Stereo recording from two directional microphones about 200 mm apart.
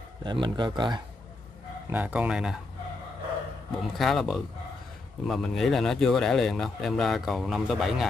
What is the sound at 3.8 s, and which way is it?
Speech, centre (ahead or behind).